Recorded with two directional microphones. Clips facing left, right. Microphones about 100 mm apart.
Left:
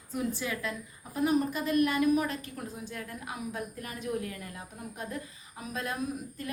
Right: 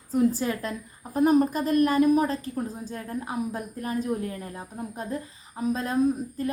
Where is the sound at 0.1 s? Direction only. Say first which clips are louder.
Right 9 dB; 35° right (ahead or behind).